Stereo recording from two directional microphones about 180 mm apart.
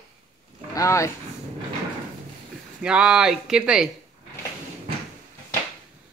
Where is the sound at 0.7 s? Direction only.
15° left (ahead or behind).